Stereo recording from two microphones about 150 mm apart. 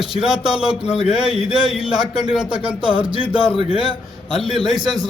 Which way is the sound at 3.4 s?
35° left (ahead or behind).